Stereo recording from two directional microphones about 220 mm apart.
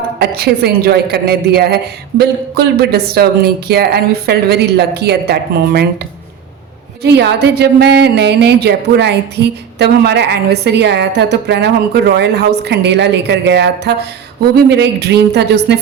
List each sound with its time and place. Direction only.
0.2 s a woman's voice: 45° right (ahead or behind)
7.0 s a woman's voice: 50° right (ahead or behind)